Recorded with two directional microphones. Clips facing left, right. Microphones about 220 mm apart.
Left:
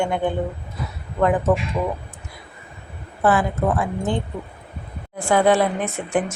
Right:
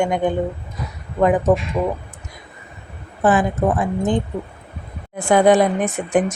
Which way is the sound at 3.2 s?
20° right (ahead or behind).